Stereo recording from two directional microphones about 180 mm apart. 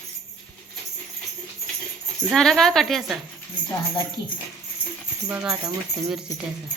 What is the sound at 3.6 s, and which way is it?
Speech, 20° left (ahead or behind).